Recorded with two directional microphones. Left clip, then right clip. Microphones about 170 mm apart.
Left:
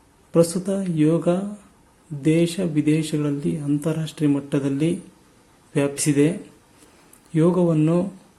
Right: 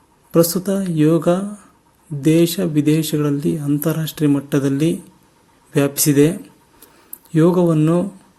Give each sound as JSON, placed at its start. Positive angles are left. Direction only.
{"t": 0.3, "sound": "speech", "side_deg": -20}
{"t": 7.3, "sound": "speech", "side_deg": -25}